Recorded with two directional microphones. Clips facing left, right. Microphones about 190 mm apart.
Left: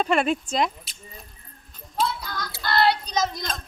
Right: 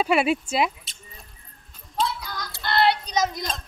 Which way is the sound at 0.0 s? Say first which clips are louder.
Right 1 dB; 5° right (ahead or behind).